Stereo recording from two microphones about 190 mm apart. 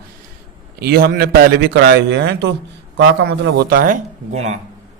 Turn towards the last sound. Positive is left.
turn(degrees=-35)  # may be behind; listen again after turning